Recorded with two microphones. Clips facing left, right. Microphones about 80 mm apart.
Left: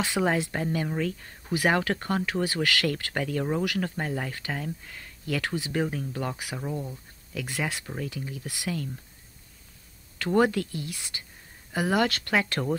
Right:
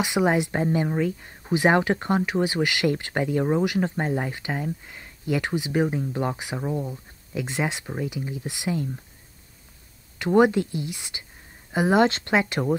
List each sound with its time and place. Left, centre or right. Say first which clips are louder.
0.0 s speech: right 4 dB; centre
10.1 s speech: right 5 dB; centre